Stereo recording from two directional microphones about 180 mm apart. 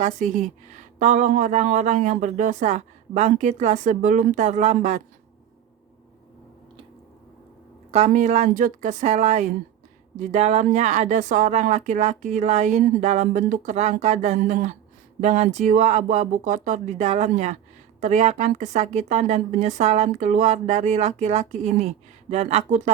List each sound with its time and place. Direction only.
0.0 s speech: 45° right (ahead or behind)
7.9 s a woman's voice: 35° right (ahead or behind)